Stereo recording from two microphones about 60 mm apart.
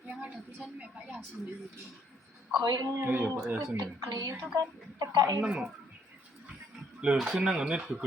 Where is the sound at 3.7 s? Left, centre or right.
Right.